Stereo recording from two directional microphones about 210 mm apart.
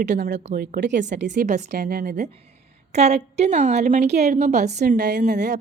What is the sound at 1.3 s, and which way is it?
Speech, 35° right (ahead or behind).